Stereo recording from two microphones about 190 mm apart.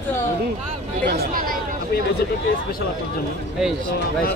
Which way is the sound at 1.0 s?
55° right (ahead or behind).